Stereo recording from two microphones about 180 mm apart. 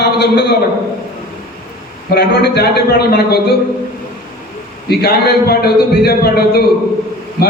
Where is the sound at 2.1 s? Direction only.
65° left (ahead or behind).